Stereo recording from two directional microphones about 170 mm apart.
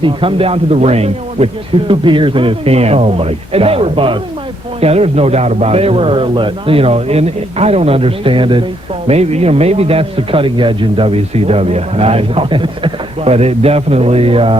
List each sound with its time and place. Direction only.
0.0 s a man's voice: 30° right (ahead or behind)